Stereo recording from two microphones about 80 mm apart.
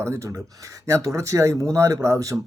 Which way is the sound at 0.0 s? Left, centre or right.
Right.